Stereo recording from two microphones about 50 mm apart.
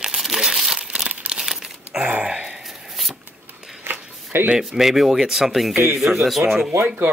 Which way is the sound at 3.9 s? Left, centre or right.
Right.